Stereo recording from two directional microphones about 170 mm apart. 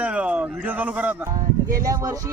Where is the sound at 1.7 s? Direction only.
20° right (ahead or behind).